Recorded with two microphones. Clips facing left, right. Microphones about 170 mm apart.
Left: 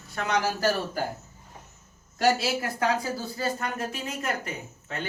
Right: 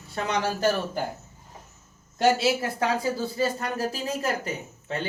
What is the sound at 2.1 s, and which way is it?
A woman's voice, 25° right (ahead or behind).